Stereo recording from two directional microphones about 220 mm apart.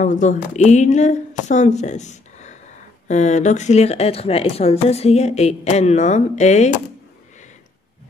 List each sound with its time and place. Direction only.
0.0 s speech: 35° left (ahead or behind)